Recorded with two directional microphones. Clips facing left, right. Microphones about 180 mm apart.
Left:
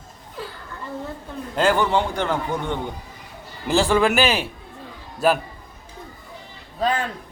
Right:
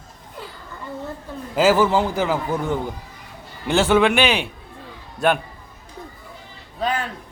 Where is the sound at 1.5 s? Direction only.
5° right (ahead or behind).